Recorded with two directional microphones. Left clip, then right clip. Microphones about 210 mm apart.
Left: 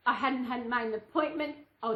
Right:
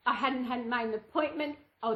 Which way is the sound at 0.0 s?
15° right (ahead or behind).